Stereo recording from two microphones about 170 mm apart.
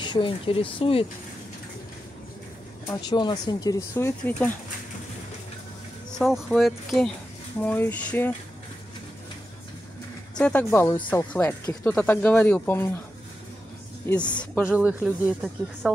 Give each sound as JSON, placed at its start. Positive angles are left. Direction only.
{"t": 0.0, "sound": "speech", "side_deg": 30}
{"t": 2.9, "sound": "speech", "side_deg": 25}
{"t": 6.1, "sound": "speech", "side_deg": 0}
{"t": 10.3, "sound": "speech", "side_deg": 10}
{"t": 14.3, "sound": "speech", "side_deg": 5}
{"t": 14.6, "sound": "speech", "side_deg": -10}